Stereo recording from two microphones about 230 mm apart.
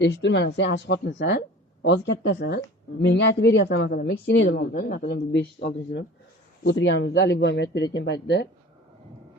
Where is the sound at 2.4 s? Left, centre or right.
Left.